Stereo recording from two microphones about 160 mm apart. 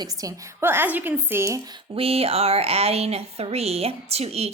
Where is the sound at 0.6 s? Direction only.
15° right (ahead or behind).